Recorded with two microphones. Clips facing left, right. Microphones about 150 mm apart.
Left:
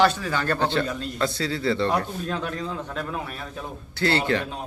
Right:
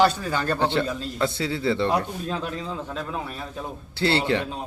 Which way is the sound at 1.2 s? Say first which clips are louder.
Right 1 dB; 20° right (ahead or behind).